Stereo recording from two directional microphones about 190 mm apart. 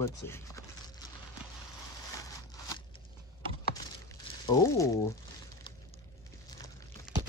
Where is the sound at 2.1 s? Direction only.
20° left (ahead or behind).